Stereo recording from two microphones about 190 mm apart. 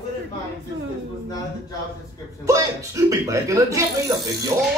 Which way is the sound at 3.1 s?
15° right (ahead or behind).